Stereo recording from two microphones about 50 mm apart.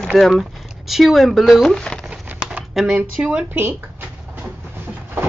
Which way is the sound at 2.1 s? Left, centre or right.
Right.